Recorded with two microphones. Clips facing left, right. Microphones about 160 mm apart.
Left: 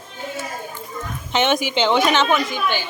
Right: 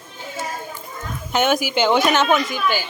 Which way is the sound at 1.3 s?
5° right (ahead or behind).